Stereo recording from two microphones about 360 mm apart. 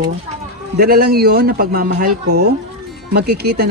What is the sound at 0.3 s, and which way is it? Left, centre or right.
Speech, right.